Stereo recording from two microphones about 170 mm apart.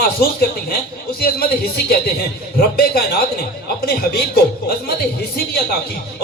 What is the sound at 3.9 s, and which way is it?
Speech, 65° left (ahead or behind).